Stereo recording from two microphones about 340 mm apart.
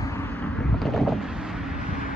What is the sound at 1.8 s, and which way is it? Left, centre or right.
Vehicle, left.